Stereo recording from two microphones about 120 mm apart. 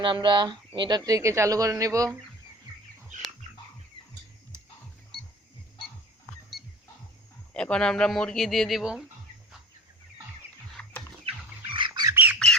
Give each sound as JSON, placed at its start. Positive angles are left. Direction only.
{"t": 0.0, "sound": "speech", "side_deg": -40}
{"t": 7.5, "sound": "speech", "side_deg": 10}
{"t": 10.8, "sound": "pig", "side_deg": 5}
{"t": 11.3, "sound": "bird", "side_deg": -55}
{"t": 11.7, "sound": "squawk", "side_deg": -40}
{"t": 12.1, "sound": "squawk", "side_deg": -15}